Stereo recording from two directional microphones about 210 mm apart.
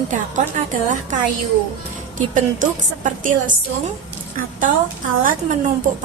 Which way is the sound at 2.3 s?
35° right (ahead or behind).